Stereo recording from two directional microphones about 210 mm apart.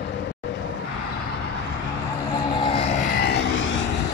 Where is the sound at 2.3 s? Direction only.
20° left (ahead or behind); by 3.8 s 60° left (ahead or behind).